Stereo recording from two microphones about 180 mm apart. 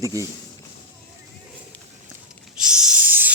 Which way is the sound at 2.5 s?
5° right (ahead or behind).